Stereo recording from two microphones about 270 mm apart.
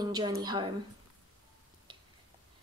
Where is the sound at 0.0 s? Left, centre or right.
Centre.